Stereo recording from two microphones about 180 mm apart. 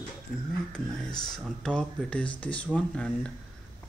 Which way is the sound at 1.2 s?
5° left (ahead or behind).